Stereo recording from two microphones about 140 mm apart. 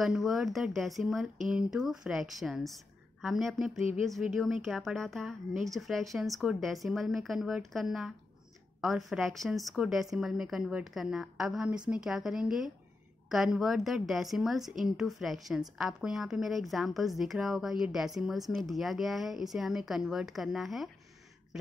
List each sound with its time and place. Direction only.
0.0 s a woman's voice: centre (ahead or behind)